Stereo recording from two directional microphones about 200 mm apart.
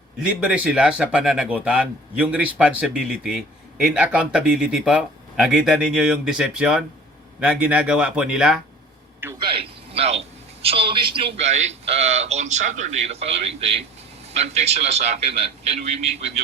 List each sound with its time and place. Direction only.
0.2 s speech: 5° right (ahead or behind)
9.4 s a sound: 25° right (ahead or behind)
10.6 s speech: 30° right (ahead or behind)